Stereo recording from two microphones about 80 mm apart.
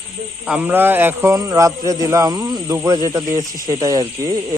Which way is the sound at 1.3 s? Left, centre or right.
Right.